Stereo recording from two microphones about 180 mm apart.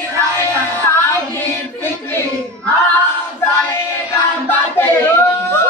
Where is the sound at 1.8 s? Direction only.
10° left (ahead or behind).